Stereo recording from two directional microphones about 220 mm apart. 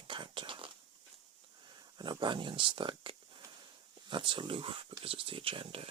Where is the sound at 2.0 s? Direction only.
20° right (ahead or behind).